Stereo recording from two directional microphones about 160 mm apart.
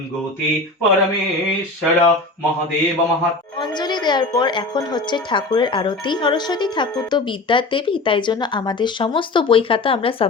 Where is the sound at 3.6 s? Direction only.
25° left (ahead or behind).